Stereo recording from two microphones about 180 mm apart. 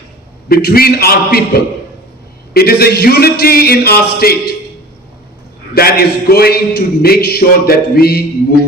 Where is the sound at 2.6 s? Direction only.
60° left (ahead or behind).